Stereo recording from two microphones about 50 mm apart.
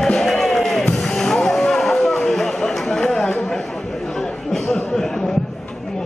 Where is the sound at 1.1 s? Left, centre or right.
Centre.